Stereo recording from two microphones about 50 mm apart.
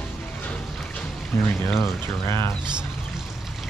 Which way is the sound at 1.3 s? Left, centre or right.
Left.